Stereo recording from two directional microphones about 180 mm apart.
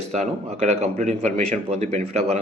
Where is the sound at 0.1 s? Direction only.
40° right (ahead or behind).